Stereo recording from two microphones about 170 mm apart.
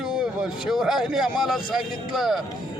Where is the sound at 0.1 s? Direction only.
5° right (ahead or behind).